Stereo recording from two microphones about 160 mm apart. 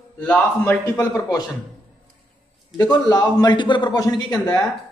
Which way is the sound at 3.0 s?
25° left (ahead or behind).